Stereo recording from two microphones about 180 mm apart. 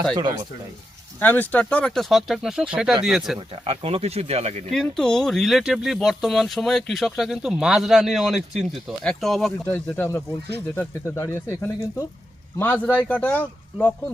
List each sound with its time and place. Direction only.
0.2 s speech: 25° right (ahead or behind)
1.2 s speech: 10° left (ahead or behind)
3.6 s speech: 35° right (ahead or behind)
4.7 s speech: 5° left (ahead or behind)
9.6 s speech: 10° left (ahead or behind)